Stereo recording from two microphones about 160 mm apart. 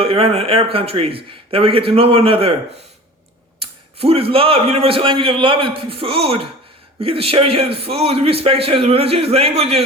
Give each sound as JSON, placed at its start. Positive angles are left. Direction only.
{"t": 0.0, "sound": "a man's voice", "side_deg": -35}
{"t": 3.6, "sound": "a man's voice", "side_deg": -40}